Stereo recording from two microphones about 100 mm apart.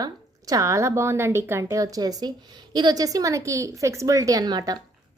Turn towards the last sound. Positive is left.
turn(degrees=-40)  # may be behind; listen again after turning